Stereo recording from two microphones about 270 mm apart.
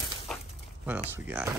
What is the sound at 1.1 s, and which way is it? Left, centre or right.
Speech, centre.